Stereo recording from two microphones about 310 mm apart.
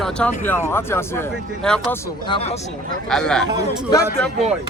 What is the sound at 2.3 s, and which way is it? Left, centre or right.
Speech, left.